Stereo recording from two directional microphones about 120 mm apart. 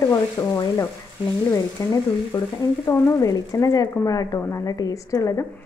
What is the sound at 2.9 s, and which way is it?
Speech, 25° left (ahead or behind).